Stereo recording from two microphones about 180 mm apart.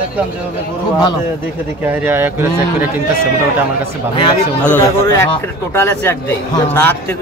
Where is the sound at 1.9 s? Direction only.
10° right (ahead or behind).